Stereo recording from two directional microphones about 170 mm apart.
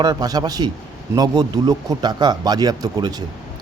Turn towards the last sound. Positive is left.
turn(degrees=-25)  # may be behind; listen again after turning